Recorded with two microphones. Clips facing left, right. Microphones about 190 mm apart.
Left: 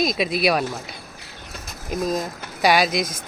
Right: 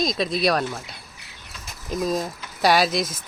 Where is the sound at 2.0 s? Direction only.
Centre (ahead or behind).